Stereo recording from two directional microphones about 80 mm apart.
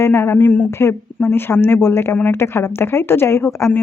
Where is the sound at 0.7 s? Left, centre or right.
Left.